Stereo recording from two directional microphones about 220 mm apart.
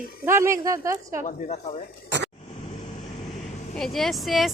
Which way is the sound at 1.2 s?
30° left (ahead or behind).